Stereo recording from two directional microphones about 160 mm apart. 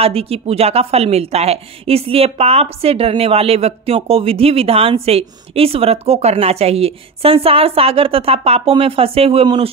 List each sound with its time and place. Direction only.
0.0 s a woman's voice: 40° right (ahead or behind)